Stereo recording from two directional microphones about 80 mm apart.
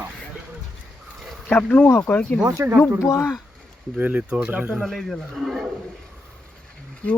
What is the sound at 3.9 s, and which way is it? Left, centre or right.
Speech, right.